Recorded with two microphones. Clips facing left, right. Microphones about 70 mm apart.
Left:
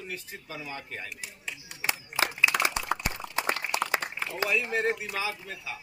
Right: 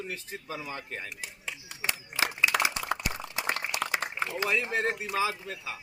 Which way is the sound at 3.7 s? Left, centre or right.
Left.